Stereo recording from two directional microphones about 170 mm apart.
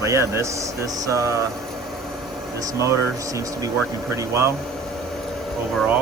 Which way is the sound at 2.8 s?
20° right (ahead or behind).